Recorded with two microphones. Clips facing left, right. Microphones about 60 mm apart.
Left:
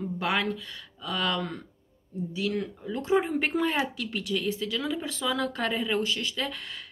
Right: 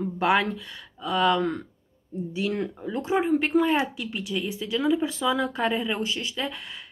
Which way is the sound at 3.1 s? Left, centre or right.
Centre.